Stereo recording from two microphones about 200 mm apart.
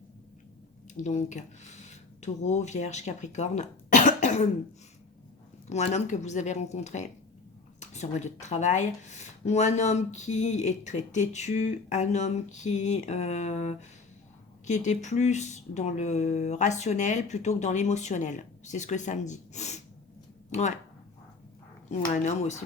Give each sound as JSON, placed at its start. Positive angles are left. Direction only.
{"t": 1.0, "sound": "speech", "side_deg": 35}
{"t": 5.6, "sound": "speech", "side_deg": 35}
{"t": 21.8, "sound": "speech", "side_deg": 35}